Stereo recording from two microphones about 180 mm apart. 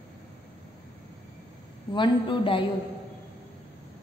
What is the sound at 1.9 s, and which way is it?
Speech, 25° left (ahead or behind).